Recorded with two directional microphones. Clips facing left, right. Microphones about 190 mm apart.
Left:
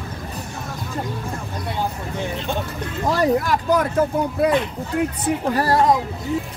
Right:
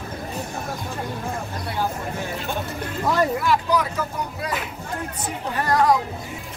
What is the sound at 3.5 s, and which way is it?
Speech, 50° left (ahead or behind).